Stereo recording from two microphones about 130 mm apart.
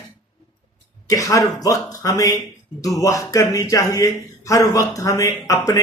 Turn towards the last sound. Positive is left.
turn(degrees=25)  # may be behind; listen again after turning